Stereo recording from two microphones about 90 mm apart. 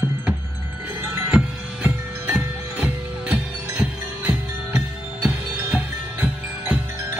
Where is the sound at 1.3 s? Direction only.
20° right (ahead or behind).